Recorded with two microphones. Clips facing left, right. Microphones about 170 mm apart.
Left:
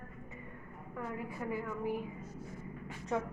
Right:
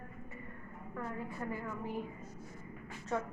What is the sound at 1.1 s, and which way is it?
Speech, 10° left (ahead or behind).